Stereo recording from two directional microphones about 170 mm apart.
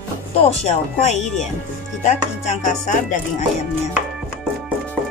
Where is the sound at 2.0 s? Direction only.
45° left (ahead or behind).